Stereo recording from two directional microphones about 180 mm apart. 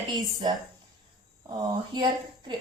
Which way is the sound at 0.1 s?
20° right (ahead or behind).